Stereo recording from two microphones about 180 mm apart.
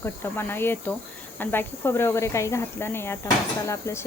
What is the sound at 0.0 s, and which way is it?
Speech, 10° left (ahead or behind).